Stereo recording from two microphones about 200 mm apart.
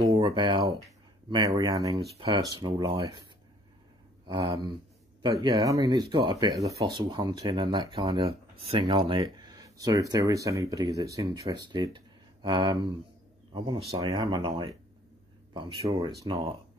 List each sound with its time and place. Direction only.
0.0 s speech: 20° right (ahead or behind)
4.3 s speech: 20° right (ahead or behind)